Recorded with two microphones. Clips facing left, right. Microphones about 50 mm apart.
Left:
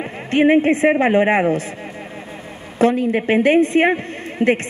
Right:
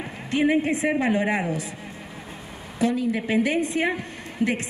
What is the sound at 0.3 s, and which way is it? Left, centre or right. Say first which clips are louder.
A woman's voice: left 8 dB; left.